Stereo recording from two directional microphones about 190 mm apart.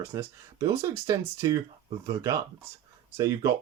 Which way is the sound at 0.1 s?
15° right (ahead or behind).